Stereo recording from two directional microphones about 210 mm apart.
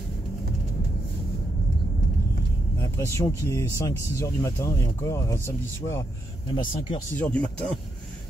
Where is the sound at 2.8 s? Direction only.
15° left (ahead or behind).